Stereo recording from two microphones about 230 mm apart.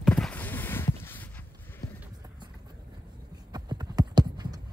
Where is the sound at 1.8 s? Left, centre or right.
Left.